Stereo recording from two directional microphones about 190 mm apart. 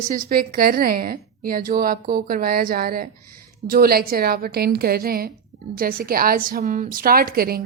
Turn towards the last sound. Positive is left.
turn(degrees=-50)  # may be behind; listen again after turning